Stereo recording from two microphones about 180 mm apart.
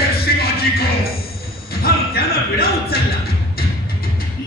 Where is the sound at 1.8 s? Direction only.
60° left (ahead or behind).